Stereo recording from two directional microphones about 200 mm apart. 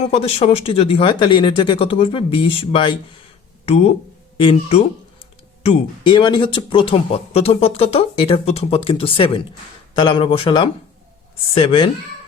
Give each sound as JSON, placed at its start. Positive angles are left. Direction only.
{"t": 0.0, "sound": "speech", "side_deg": 30}